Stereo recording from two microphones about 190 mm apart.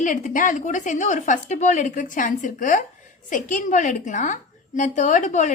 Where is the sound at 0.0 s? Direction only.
45° left (ahead or behind).